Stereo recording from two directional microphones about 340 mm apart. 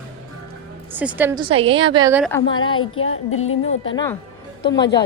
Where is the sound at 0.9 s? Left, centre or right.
Centre.